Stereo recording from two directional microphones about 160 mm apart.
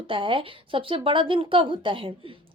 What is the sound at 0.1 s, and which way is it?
A woman's voice, 30° right (ahead or behind).